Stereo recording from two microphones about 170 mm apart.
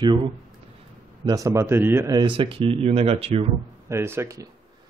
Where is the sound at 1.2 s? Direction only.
20° right (ahead or behind); by 3.4 s 35° right (ahead or behind).